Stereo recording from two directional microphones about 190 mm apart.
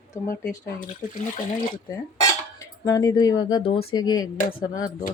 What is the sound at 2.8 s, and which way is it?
Speech, 20° left (ahead or behind).